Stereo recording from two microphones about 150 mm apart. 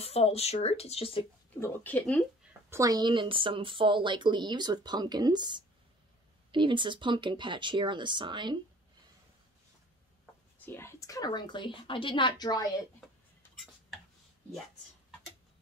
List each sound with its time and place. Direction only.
0.0 s speech: 45° left (ahead or behind)
1.6 s speech: 10° left (ahead or behind)
2.7 s speech: 25° right (ahead or behind)
10.6 s a woman's voice: 15° left (ahead or behind)